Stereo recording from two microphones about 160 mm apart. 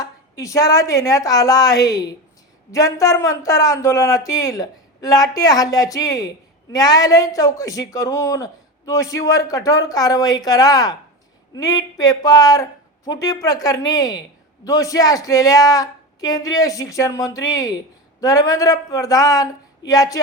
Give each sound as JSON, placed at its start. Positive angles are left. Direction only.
{"t": 0.0, "sound": "speech", "side_deg": 20}